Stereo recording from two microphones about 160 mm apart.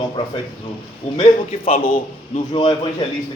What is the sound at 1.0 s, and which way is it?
A man's voice, 45° left (ahead or behind).